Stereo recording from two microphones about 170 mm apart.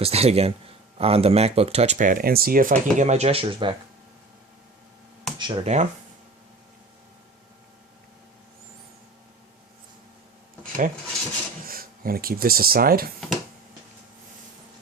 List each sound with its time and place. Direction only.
0.0 s speech: 35° right (ahead or behind)
5.4 s speech: 30° right (ahead or behind)
5.6 s speech: 45° right (ahead or behind)
10.6 s a sound: 50° right (ahead or behind)
11.6 s speech: 60° right (ahead or behind)